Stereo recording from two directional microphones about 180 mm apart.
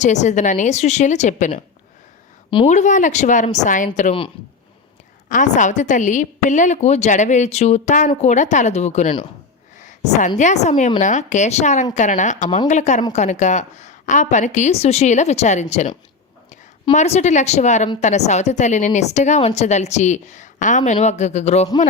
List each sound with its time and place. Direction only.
0.0 s a woman's voice: 40° left (ahead or behind)
2.6 s speech: 40° left (ahead or behind)
5.3 s a woman's voice: 45° left (ahead or behind)
16.9 s a woman's voice: 40° left (ahead or behind)